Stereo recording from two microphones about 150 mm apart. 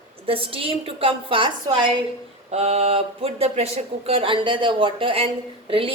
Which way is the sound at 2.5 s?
45° right (ahead or behind).